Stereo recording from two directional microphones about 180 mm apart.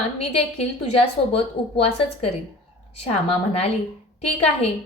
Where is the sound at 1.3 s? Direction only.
35° left (ahead or behind).